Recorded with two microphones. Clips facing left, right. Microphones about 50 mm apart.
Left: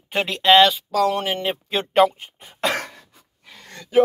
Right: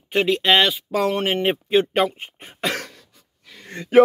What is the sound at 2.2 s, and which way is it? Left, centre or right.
Speech, right.